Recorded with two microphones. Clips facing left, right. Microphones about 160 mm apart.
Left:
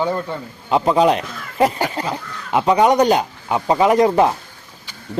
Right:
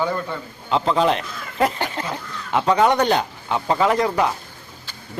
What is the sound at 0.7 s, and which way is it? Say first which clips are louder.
Speech: left 4 dB; 15° left (ahead or behind).